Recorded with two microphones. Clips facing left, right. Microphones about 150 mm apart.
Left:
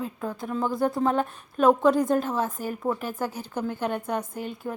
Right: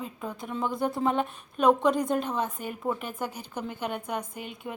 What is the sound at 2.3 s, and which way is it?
Speech, 5° left (ahead or behind).